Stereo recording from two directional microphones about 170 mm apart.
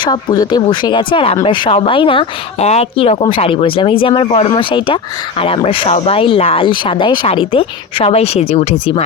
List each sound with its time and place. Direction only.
0.0 s speech: 25° left (ahead or behind)